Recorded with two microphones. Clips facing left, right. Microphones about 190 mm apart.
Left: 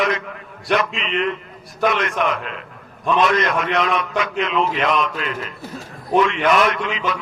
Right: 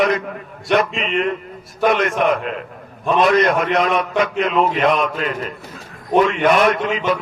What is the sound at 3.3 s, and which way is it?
A man's voice, 40° right (ahead or behind).